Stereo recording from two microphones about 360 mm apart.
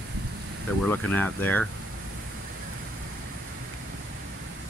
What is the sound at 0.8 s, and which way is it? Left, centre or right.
Speech, centre.